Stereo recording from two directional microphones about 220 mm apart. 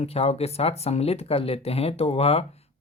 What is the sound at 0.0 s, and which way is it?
Speech, 25° left (ahead or behind).